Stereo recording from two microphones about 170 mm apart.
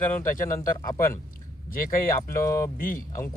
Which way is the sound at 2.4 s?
15° left (ahead or behind).